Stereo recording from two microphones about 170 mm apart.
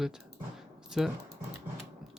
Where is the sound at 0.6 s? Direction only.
Centre (ahead or behind).